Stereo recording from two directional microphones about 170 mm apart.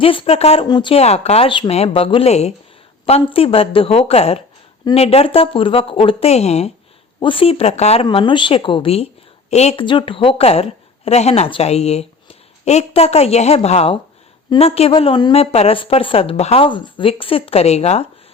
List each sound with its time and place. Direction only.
0.0 s a woman's voice: 30° left (ahead or behind)
8.0 s a woman's voice: 25° left (ahead or behind)